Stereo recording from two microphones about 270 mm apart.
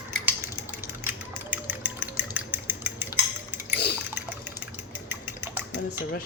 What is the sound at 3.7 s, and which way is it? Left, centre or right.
Liquid, left.